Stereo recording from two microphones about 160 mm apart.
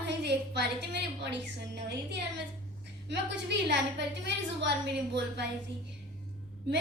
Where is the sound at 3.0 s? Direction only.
90° right.